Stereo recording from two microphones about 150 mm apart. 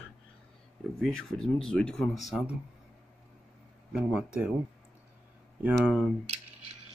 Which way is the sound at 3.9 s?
5° right (ahead or behind).